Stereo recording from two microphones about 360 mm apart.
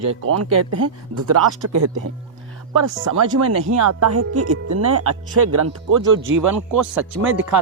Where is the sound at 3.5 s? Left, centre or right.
Right.